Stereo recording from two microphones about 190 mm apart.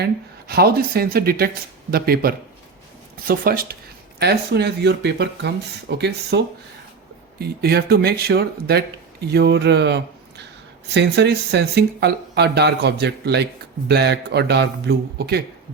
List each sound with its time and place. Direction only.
0.0 s speech: 55° right (ahead or behind)